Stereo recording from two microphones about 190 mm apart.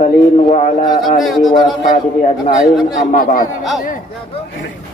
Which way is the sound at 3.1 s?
45° left (ahead or behind).